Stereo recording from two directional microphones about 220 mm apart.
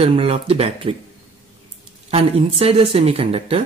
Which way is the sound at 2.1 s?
25° right (ahead or behind).